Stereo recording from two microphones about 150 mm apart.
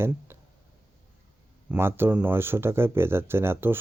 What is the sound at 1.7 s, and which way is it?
Speech, 15° right (ahead or behind).